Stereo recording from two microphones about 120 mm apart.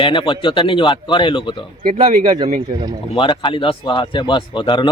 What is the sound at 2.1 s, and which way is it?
Speech, 80° right.